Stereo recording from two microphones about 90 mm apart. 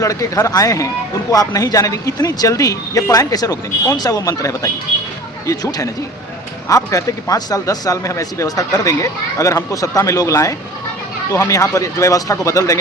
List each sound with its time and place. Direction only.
0.0 s speech: 40° left (ahead or behind)